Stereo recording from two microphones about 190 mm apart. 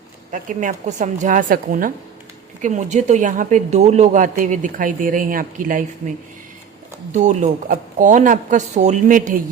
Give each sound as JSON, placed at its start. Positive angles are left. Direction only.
{"t": 0.3, "sound": "speech", "side_deg": -45}
{"t": 7.1, "sound": "speech", "side_deg": -40}